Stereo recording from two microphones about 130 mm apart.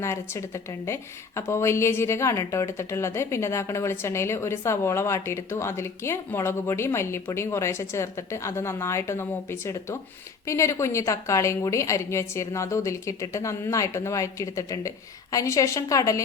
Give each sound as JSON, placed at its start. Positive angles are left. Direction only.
{"t": 0.0, "sound": "a woman's voice", "side_deg": 20}